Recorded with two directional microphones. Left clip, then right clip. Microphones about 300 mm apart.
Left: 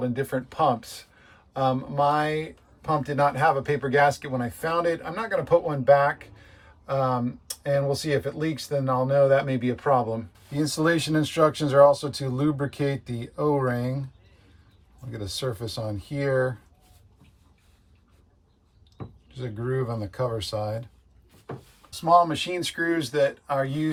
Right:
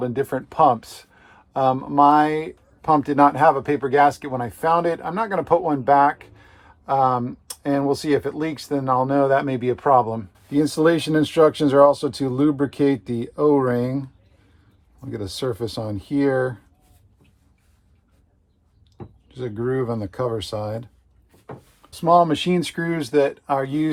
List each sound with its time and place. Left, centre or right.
0.0 s speech: centre
15.1 s speech: centre
19.3 s speech: centre